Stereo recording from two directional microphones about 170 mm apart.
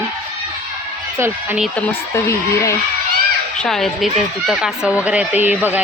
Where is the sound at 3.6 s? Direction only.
Centre (ahead or behind).